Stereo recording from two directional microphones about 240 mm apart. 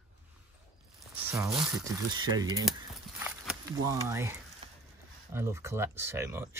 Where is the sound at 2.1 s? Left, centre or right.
Centre.